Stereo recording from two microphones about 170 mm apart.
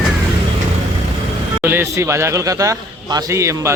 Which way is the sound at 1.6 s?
15° right (ahead or behind).